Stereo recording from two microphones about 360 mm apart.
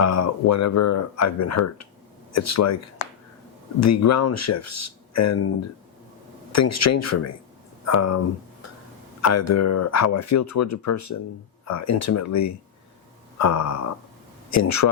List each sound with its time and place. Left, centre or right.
0.0 s speech: left
3.8 s speech: left
6.5 s speech: left
9.2 s speech: left